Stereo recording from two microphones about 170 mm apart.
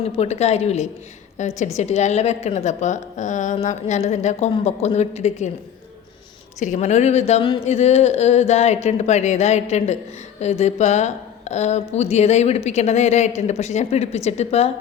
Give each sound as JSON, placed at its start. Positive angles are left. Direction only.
{"t": 0.2, "sound": "a woman's voice", "side_deg": 40}
{"t": 6.6, "sound": "speech", "side_deg": 45}